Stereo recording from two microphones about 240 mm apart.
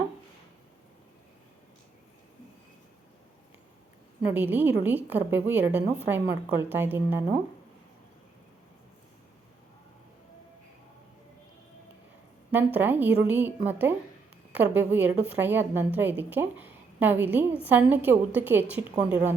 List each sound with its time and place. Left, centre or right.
4.2 s a woman's voice: centre
12.5 s a woman's voice: centre